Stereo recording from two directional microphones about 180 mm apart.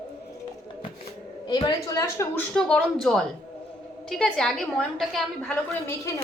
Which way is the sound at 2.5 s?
5° left (ahead or behind).